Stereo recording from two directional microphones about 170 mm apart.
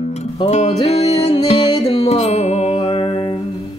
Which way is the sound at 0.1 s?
40° left (ahead or behind).